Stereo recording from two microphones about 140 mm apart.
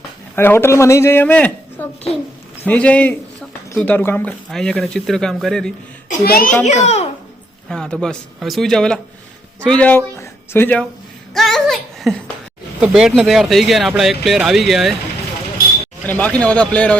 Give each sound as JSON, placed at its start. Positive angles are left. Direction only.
{"t": 0.3, "sound": "a man's voice", "side_deg": 15}
{"t": 6.1, "sound": "a child's voice", "side_deg": 80}
{"t": 6.7, "sound": "a child's voice", "side_deg": 55}
{"t": 7.7, "sound": "speech", "side_deg": 5}
{"t": 11.3, "sound": "speech", "side_deg": 0}
{"t": 16.0, "sound": "a man's voice", "side_deg": 10}